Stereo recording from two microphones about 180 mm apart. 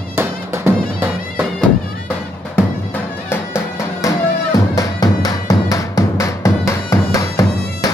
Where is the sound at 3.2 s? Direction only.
15° left (ahead or behind).